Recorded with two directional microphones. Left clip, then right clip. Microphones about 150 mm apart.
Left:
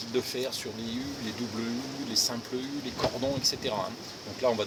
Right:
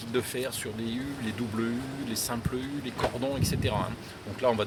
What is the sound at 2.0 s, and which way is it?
Speech, 25° right (ahead or behind).